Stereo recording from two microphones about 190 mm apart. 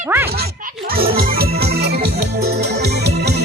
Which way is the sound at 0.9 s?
50° right (ahead or behind).